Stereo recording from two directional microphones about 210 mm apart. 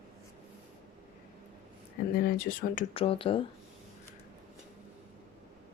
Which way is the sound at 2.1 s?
45° left (ahead or behind).